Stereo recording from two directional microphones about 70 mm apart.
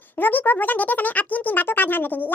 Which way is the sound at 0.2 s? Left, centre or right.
Left.